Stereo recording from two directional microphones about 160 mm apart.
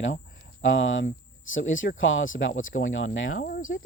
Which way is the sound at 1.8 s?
75° left (ahead or behind).